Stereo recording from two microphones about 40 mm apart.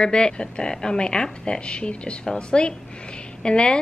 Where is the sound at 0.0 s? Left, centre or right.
Left.